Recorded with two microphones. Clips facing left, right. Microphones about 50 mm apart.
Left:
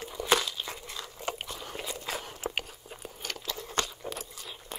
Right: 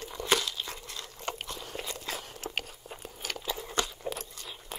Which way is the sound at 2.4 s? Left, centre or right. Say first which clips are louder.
Left 7 dB; left.